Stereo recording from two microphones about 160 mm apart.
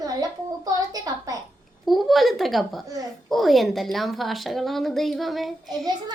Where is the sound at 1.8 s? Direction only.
Centre (ahead or behind).